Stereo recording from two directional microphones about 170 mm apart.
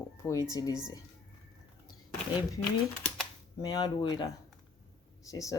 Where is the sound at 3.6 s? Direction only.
20° left (ahead or behind).